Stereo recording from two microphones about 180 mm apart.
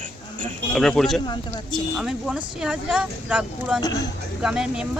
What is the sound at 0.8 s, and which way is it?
Speech, centre (ahead or behind).